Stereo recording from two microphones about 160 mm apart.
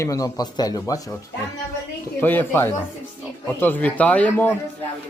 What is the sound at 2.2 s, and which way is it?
Speech, 10° left (ahead or behind).